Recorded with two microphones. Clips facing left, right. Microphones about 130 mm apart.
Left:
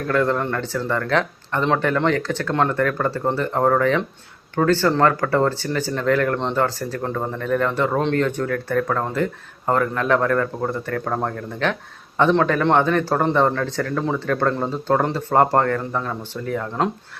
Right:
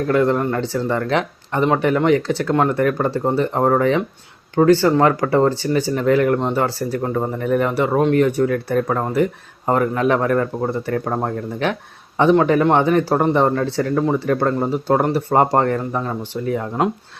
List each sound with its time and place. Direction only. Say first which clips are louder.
0.1 s speech: right 2 dB; 15° right (ahead or behind)